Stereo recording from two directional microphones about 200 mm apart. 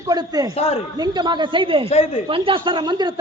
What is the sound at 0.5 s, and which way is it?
Speech, 30° left (ahead or behind).